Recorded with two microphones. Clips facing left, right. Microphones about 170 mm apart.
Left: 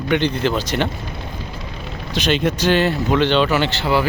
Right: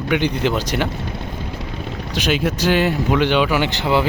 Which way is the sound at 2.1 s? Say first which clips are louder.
Left 1 dB; 10° right (ahead or behind).